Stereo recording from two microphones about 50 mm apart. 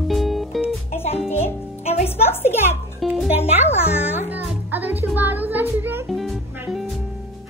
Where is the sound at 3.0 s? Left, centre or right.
Centre.